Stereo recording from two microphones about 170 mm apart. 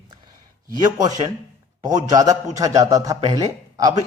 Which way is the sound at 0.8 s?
20° right (ahead or behind).